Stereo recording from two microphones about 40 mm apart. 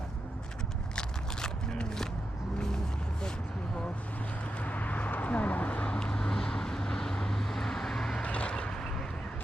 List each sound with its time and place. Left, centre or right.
0.9 s biting: centre
4.6 s a sound: left
5.9 s vehicle: left
8.2 s vehicle: left